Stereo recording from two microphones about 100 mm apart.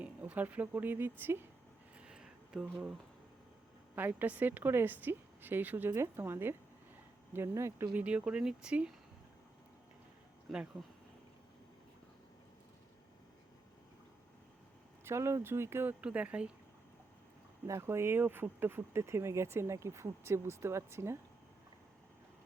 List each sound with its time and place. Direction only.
0.0 s speech: 15° right (ahead or behind)
2.0 s a sound: 10° right (ahead or behind)
3.9 s speech: 20° right (ahead or behind)
7.9 s speech: 15° right (ahead or behind)
10.5 s speech: centre (ahead or behind)
15.0 s speech: 25° right (ahead or behind)
17.7 s speech: 25° right (ahead or behind)